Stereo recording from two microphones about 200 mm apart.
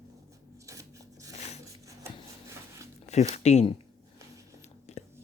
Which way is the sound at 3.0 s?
35° left (ahead or behind).